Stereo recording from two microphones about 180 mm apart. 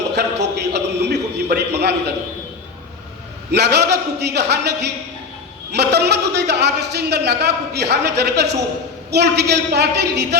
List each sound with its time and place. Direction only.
0.2 s a man's voice: 70° right (ahead or behind)
3.5 s a man's voice: 65° right (ahead or behind)